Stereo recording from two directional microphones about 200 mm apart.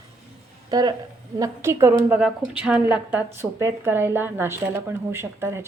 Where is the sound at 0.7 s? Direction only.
20° right (ahead or behind).